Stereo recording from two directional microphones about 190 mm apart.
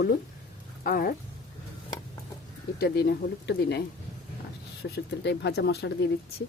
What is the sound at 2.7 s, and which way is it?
Speech, 55° left (ahead or behind).